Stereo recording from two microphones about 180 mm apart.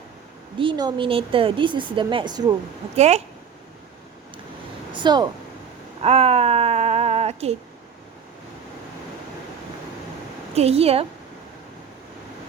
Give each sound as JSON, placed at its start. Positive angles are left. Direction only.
{"t": 0.6, "sound": "a woman's voice", "side_deg": -25}
{"t": 2.9, "sound": "a woman's voice", "side_deg": -35}
{"t": 4.9, "sound": "speech", "side_deg": -25}
{"t": 6.0, "sound": "speech", "side_deg": -35}
{"t": 10.5, "sound": "a woman's voice", "side_deg": -35}